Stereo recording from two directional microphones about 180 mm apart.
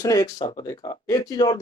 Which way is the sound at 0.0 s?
20° left (ahead or behind).